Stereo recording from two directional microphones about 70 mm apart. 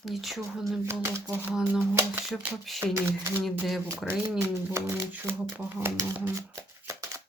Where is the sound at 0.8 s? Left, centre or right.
Right.